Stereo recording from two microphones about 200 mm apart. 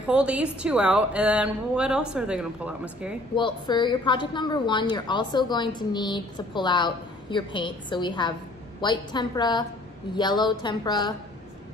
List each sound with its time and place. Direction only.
0.0 s speech: 5° right (ahead or behind)
3.3 s a woman's voice: 25° left (ahead or behind)